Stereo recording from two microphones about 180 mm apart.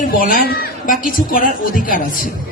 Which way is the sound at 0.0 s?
50° left (ahead or behind).